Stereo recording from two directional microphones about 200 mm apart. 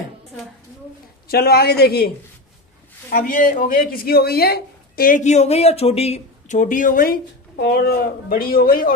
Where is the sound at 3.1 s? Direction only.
45° left (ahead or behind).